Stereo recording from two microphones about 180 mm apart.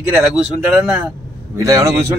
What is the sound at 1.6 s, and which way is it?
Speech, 20° right (ahead or behind).